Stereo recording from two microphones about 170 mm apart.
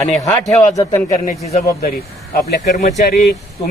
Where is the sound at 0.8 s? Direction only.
20° left (ahead or behind).